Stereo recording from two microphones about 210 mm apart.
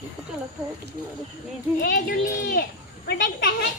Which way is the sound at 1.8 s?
40° left (ahead or behind).